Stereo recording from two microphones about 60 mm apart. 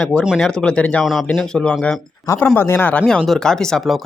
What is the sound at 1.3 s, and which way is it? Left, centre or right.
Speech, centre.